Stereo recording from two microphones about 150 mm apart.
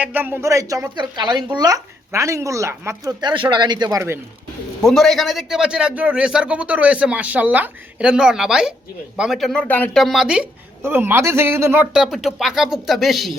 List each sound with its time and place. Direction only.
0.0 s speech: 15° right (ahead or behind)
4.8 s a man's voice: centre (ahead or behind); by 11.9 s 15° right (ahead or behind)
11.9 s speech: 5° right (ahead or behind)